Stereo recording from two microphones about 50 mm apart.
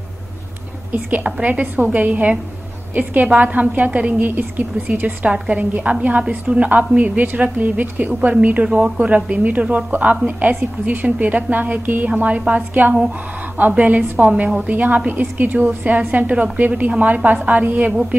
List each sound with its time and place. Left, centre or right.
0.9 s a woman's voice: right
8.1 s a woman's voice: right
8.6 s speech: centre
9.0 s a woman's voice: right